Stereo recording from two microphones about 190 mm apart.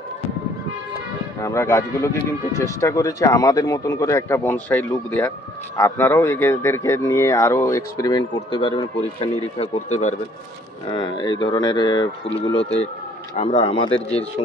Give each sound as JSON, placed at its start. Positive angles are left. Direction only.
{"t": 1.4, "sound": "speech", "side_deg": 15}
{"t": 10.9, "sound": "speech", "side_deg": 25}
{"t": 12.6, "sound": "speech", "side_deg": 35}